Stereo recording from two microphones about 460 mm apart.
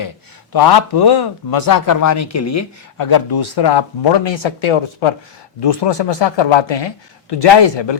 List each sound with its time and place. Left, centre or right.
0.5 s speech: left
5.6 s a man's voice: left